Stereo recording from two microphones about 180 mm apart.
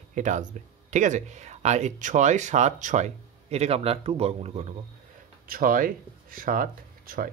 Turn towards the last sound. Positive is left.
turn(degrees=-50)  # may be behind; listen again after turning